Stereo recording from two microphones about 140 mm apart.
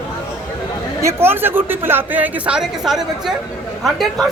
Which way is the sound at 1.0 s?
15° right (ahead or behind).